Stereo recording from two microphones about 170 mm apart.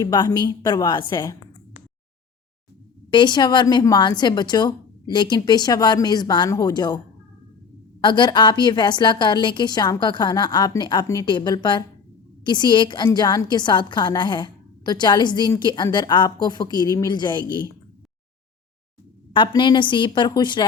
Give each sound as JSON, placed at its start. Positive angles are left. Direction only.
{"t": 0.0, "sound": "a woman's voice", "side_deg": 20}
{"t": 3.1, "sound": "a woman's voice", "side_deg": 25}
{"t": 8.0, "sound": "a woman's voice", "side_deg": 25}
{"t": 19.3, "sound": "a woman's voice", "side_deg": 30}